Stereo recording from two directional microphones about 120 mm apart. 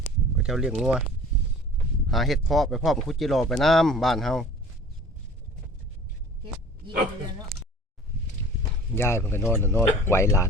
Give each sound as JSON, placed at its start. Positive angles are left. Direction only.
{"t": 0.3, "sound": "speech", "side_deg": -5}
{"t": 2.0, "sound": "speech", "side_deg": 0}
{"t": 9.0, "sound": "speech", "side_deg": 20}